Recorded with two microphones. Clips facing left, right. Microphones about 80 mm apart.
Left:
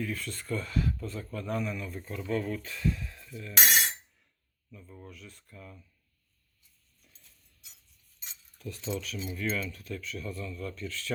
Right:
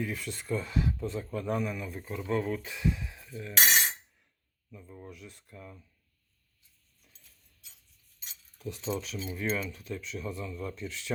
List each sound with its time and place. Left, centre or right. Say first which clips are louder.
0.0 s speech: even; centre
4.7 s speech: right 2 dB; centre
8.5 s speech: right 1 dB; right